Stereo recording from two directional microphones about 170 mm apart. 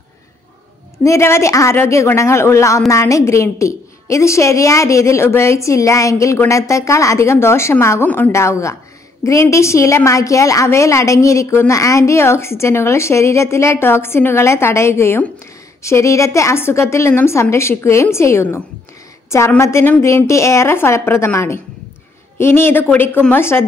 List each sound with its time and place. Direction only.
0.9 s a woman's voice: 15° left (ahead or behind)